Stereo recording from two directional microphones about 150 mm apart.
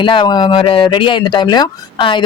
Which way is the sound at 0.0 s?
35° left (ahead or behind).